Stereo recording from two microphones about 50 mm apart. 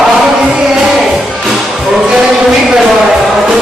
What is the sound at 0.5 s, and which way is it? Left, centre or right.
Music, centre.